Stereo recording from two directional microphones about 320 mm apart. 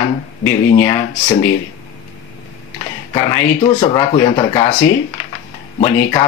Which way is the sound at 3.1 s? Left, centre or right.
Centre.